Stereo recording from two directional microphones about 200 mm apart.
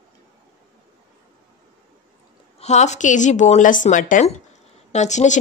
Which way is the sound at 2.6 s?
35° left (ahead or behind).